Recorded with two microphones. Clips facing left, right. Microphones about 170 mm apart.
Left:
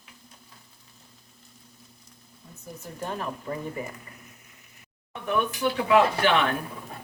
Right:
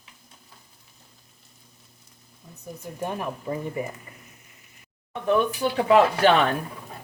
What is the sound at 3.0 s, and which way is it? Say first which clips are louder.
Speech: right 2 dB; 15° right (ahead or behind).